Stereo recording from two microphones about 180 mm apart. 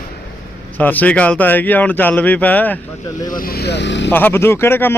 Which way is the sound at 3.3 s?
55° left (ahead or behind).